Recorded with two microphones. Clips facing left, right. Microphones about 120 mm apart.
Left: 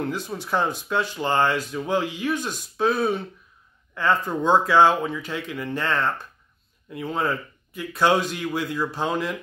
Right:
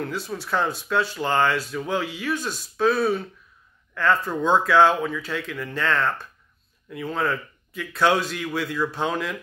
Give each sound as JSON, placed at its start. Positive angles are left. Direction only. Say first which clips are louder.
{"t": 0.0, "sound": "speech", "louder": "left 1 dB", "side_deg": 15}